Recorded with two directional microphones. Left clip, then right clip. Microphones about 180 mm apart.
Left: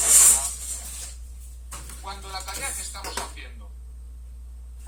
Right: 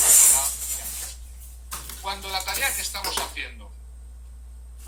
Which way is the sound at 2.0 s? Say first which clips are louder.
Right 7 dB; 25° right (ahead or behind).